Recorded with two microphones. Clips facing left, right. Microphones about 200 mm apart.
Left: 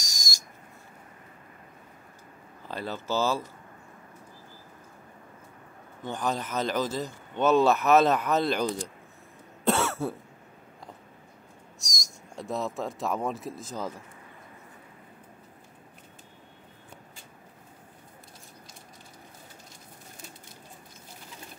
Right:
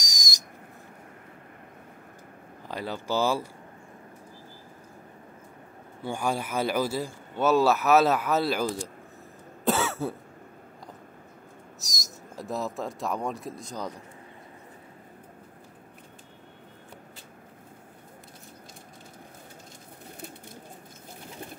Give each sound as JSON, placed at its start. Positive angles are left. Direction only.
{"t": 0.0, "sound": "whistle", "side_deg": -20}
{"t": 2.7, "sound": "speech", "side_deg": -15}
{"t": 6.0, "sound": "speech", "side_deg": -10}
{"t": 9.7, "sound": "cough", "side_deg": 0}
{"t": 11.8, "sound": "speech", "side_deg": 0}